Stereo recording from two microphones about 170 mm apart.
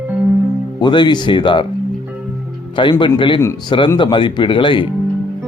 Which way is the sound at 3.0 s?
30° left (ahead or behind).